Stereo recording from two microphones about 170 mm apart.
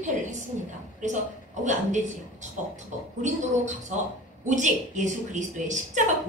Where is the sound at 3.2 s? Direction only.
45° right (ahead or behind).